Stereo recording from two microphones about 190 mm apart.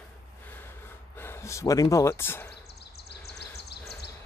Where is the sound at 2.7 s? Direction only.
60° left (ahead or behind).